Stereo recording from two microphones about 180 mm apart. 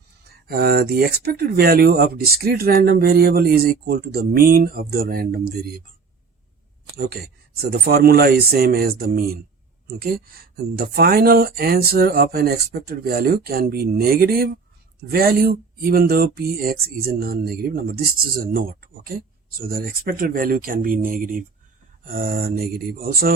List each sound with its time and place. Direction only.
0.4 s speech: 55° right (ahead or behind)
6.9 s speech: 60° right (ahead or behind)